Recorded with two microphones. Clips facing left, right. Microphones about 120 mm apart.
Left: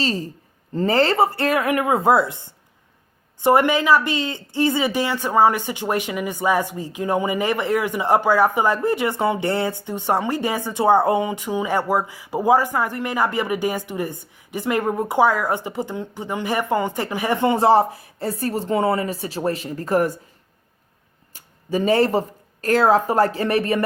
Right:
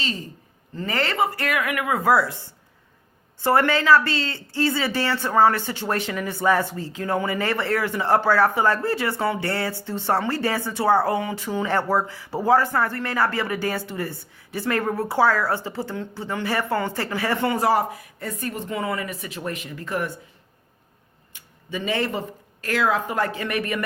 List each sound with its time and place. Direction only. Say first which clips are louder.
0.0 s a woman's voice: left 7 dB; 35° left (ahead or behind)
21.3 s a woman's voice: left 8 dB; 40° left (ahead or behind)